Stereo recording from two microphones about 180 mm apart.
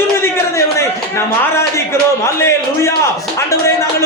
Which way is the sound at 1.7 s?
15° left (ahead or behind).